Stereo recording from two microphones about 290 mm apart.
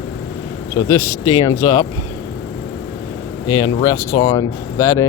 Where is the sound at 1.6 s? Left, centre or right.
Centre.